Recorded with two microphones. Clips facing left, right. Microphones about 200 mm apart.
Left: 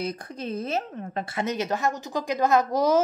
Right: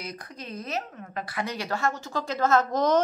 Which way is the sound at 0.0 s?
25° left (ahead or behind).